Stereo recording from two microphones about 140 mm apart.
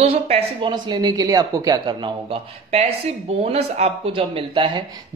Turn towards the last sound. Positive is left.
turn(degrees=-35)  # may be behind; listen again after turning